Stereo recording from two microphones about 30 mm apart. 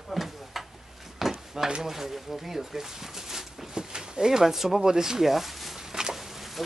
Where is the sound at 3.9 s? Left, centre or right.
Right.